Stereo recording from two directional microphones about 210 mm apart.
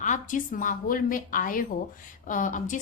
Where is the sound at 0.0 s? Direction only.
35° left (ahead or behind).